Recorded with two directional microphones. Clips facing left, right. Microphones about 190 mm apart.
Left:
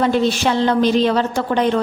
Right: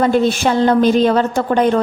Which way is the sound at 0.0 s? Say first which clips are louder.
Right 2 dB; 50° right (ahead or behind).